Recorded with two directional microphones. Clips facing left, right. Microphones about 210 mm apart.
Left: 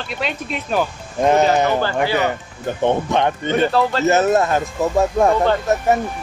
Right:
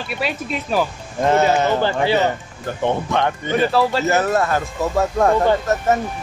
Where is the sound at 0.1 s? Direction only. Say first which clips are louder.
Right 1 dB; 5° right (ahead or behind).